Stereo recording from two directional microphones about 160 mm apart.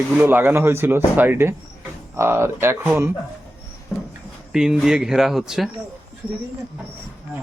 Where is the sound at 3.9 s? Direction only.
15° left (ahead or behind).